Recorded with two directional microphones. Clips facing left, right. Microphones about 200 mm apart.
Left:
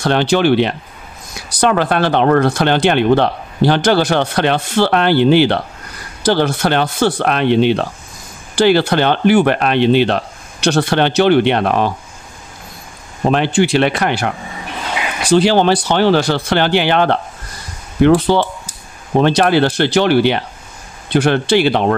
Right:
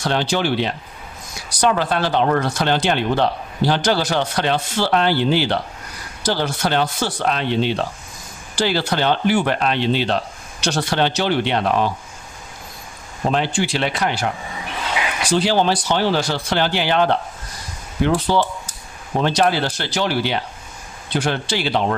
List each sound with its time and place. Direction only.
0.0 s speech: 65° left (ahead or behind)
13.3 s speech: 65° left (ahead or behind)
15.3 s speech: 65° left (ahead or behind)